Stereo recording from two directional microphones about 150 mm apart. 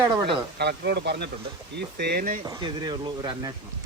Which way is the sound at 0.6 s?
90° right.